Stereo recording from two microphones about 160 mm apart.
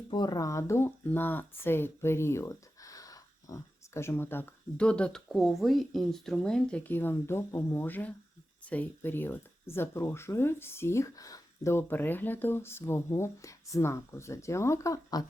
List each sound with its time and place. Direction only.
0.1 s speech: 25° left (ahead or behind)